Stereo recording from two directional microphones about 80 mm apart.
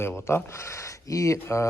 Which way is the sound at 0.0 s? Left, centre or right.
Left.